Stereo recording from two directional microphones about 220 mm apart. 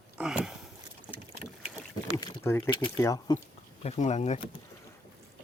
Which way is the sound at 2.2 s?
15° left (ahead or behind).